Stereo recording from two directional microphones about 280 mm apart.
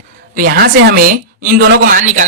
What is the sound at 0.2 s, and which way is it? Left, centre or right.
A woman's voice, right.